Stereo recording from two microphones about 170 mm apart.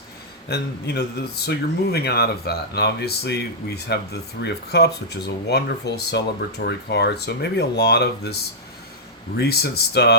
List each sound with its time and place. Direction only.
0.4 s speech: 75° left (ahead or behind)
9.4 s speech: 70° left (ahead or behind)